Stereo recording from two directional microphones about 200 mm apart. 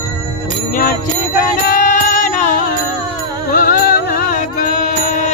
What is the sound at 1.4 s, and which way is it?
Music, 40° left (ahead or behind).